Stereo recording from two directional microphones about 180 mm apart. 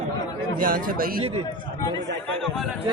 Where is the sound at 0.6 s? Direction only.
50° right (ahead or behind).